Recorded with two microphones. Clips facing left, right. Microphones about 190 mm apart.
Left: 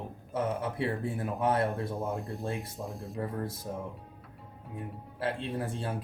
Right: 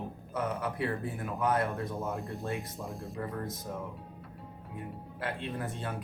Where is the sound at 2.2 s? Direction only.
Centre (ahead or behind).